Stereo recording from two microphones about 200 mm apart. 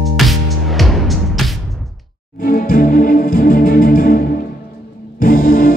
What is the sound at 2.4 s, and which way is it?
Music, 45° left (ahead or behind).